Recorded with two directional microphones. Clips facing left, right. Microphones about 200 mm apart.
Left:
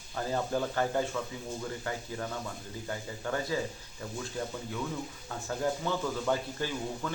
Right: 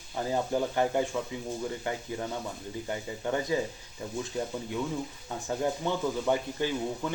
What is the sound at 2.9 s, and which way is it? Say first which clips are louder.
Speech: right 3 dB; 20° right (ahead or behind).